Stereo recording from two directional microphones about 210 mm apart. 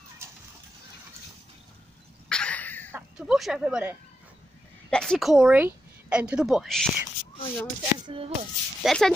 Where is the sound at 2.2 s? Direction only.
5° left (ahead or behind).